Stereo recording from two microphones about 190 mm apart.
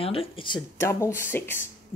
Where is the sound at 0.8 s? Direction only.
15° left (ahead or behind).